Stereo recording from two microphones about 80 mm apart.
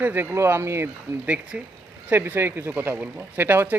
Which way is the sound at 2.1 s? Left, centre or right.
Right.